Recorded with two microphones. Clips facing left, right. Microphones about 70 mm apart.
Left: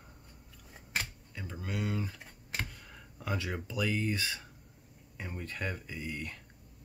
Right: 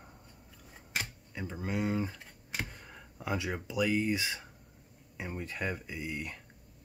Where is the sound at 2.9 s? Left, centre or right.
Centre.